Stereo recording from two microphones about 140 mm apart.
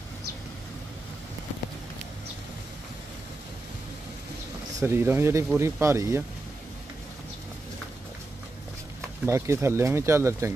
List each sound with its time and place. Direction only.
4.7 s speech: 15° right (ahead or behind)
9.2 s speech: 20° right (ahead or behind)